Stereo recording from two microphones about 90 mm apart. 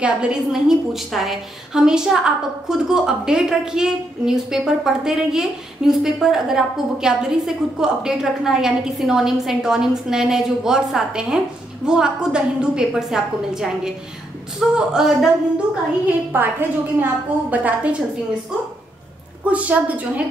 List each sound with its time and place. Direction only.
0.0 s a woman's voice: 10° right (ahead or behind)
16.3 s a woman's voice: 20° right (ahead or behind)
19.4 s a woman's voice: 15° right (ahead or behind)